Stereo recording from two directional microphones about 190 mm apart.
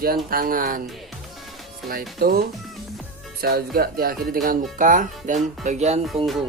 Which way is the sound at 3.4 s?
55° right (ahead or behind).